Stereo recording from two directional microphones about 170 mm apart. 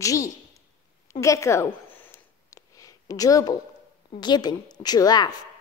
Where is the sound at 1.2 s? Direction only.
20° left (ahead or behind).